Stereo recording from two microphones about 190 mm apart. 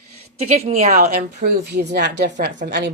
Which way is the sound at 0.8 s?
55° right (ahead or behind).